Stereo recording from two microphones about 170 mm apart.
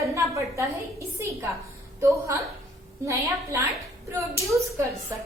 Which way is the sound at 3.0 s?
15° right (ahead or behind).